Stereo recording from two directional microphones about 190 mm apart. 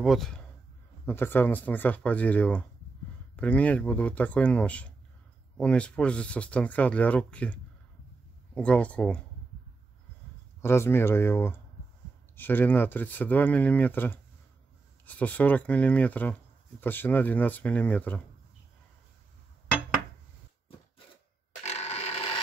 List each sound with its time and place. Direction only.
0.0 s speech: centre (ahead or behind)
8.5 s speech: 5° left (ahead or behind)
10.6 s speech: 15° left (ahead or behind)
21.6 s a sound: 35° left (ahead or behind)